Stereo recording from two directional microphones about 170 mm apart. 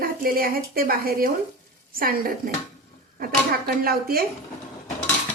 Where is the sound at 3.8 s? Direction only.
60° right (ahead or behind).